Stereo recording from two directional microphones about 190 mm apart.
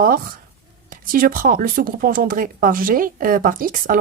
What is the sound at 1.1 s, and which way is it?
Speech, 45° right (ahead or behind).